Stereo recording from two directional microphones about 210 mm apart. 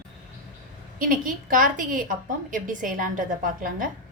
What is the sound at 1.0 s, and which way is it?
A woman's voice, 40° right (ahead or behind).